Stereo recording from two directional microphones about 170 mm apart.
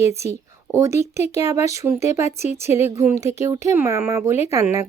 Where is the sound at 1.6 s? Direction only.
40° left (ahead or behind).